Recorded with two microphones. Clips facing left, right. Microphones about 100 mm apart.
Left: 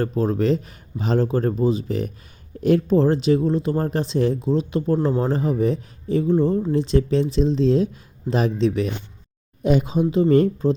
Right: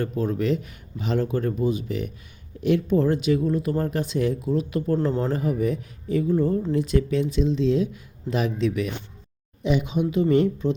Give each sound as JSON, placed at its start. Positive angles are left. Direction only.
{"t": 0.0, "sound": "speech", "side_deg": 35}
{"t": 9.6, "sound": "speech", "side_deg": 40}